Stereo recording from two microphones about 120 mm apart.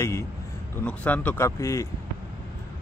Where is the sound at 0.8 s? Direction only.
15° left (ahead or behind).